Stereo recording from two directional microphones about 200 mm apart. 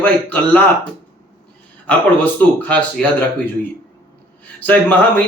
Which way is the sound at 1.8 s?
5° left (ahead or behind).